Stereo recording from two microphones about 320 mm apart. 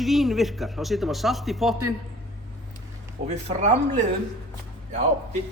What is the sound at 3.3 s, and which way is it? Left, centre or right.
Speech, right.